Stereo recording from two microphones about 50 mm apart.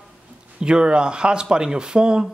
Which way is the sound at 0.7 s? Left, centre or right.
Centre.